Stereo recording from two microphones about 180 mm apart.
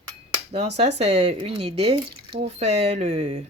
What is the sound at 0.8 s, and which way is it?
Speech, 35° right (ahead or behind).